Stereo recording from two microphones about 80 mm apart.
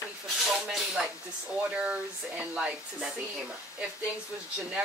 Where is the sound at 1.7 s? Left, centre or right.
Centre.